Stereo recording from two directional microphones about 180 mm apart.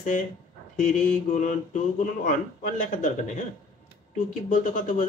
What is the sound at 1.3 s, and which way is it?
Speech, 45° left (ahead or behind).